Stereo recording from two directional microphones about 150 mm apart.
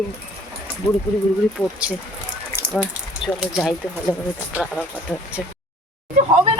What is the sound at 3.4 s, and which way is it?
Speech, centre (ahead or behind).